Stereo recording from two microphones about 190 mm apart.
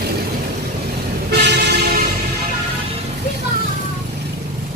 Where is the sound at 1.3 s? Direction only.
60° right (ahead or behind).